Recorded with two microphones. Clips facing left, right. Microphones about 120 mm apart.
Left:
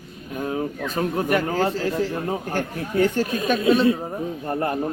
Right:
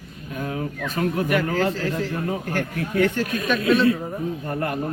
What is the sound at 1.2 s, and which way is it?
Speech, 35° left (ahead or behind).